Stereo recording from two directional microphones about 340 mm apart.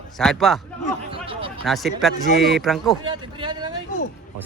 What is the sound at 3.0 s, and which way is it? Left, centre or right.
Speech, centre.